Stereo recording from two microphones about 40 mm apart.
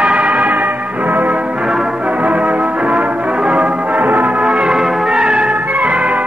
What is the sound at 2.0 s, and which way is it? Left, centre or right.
Music, right.